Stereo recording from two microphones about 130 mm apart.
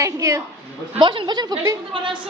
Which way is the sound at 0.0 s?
25° right (ahead or behind).